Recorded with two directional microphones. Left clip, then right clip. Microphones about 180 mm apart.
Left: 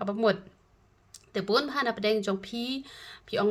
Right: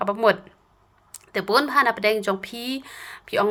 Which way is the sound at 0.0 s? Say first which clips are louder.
Right 7 dB; 20° left (ahead or behind).